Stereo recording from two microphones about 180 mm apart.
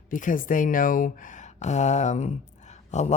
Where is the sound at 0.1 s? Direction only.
45° left (ahead or behind).